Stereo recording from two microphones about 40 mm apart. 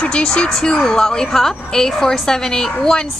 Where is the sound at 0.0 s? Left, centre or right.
Left.